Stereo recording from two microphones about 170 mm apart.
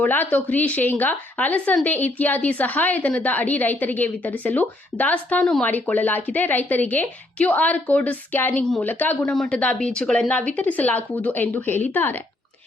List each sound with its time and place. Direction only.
0.0 s speech: 10° left (ahead or behind)